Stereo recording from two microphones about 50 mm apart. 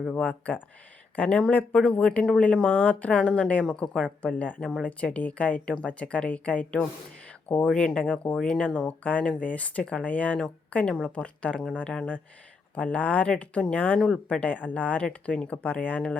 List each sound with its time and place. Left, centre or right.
0.1 s speech: left
10.8 s speech: centre
11.1 s speech: left